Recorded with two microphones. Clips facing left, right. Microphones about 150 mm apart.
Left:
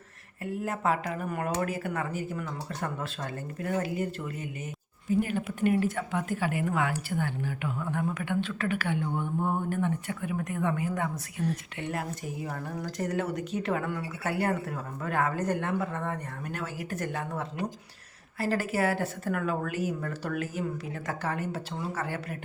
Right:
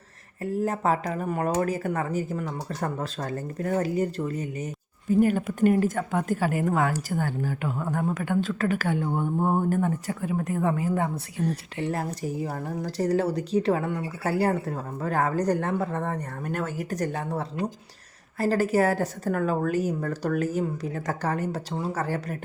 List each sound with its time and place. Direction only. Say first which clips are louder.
0.6 s a woman's voice: right 4 dB; 40° right (ahead or behind)